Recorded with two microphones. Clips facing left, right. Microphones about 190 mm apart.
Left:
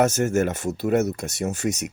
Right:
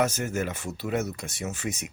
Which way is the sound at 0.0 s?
45° left (ahead or behind).